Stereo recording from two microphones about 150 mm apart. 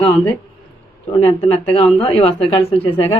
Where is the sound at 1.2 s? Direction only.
40° left (ahead or behind).